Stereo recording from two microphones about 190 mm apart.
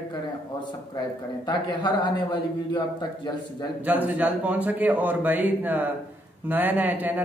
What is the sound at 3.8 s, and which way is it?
A man's voice, 10° right (ahead or behind).